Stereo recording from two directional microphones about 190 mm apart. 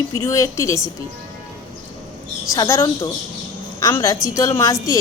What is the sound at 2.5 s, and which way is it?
A woman's voice, 15° left (ahead or behind).